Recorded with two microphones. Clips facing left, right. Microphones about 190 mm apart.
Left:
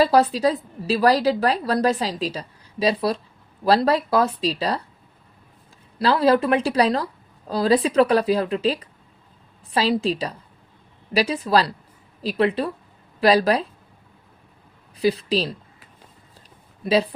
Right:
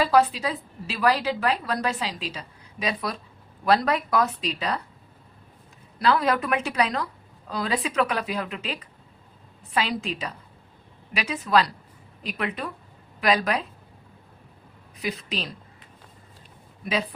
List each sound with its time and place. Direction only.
0.0 s a woman's voice: 35° left (ahead or behind)
6.0 s a woman's voice: 30° left (ahead or behind)
14.9 s a woman's voice: 30° left (ahead or behind)
16.8 s a woman's voice: 30° left (ahead or behind)